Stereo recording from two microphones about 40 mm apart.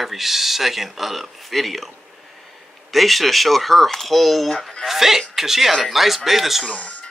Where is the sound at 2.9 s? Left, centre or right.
Centre.